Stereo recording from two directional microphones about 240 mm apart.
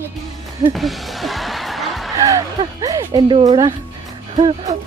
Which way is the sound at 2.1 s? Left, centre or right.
Centre.